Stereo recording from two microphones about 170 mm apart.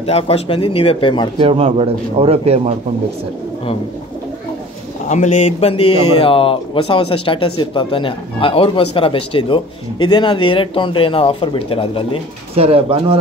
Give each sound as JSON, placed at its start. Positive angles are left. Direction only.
{"t": 0.0, "sound": "speech", "side_deg": 35}
{"t": 1.4, "sound": "speech", "side_deg": -35}
{"t": 5.0, "sound": "speech", "side_deg": 45}
{"t": 12.5, "sound": "speech", "side_deg": -35}